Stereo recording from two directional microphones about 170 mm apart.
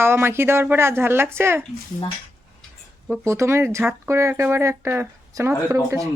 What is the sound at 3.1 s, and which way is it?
Speech, 15° right (ahead or behind).